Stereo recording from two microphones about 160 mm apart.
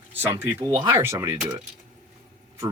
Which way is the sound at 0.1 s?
15° right (ahead or behind).